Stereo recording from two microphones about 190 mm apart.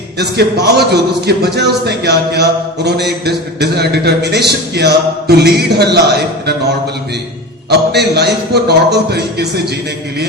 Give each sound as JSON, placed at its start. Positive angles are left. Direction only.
{"t": 0.2, "sound": "a man's voice", "side_deg": -60}
{"t": 7.7, "sound": "a man's voice", "side_deg": -60}